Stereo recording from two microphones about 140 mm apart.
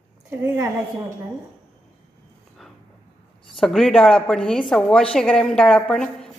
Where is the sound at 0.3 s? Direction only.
20° right (ahead or behind).